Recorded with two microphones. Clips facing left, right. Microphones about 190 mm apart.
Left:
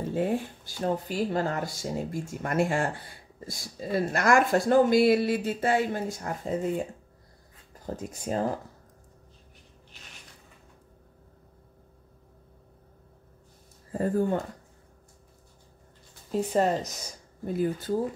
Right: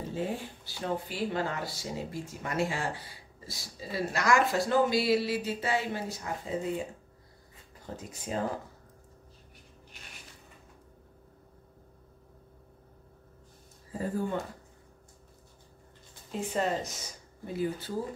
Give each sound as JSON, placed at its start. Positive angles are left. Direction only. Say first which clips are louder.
{"t": 0.1, "sound": "speech", "louder": "left 7 dB", "side_deg": 50}
{"t": 13.9, "sound": "speech", "louder": "left 6 dB", "side_deg": 50}
{"t": 16.3, "sound": "speech", "louder": "left 6 dB", "side_deg": 40}